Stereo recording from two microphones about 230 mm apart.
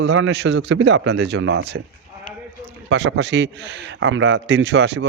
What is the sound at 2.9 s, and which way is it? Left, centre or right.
Speech, right.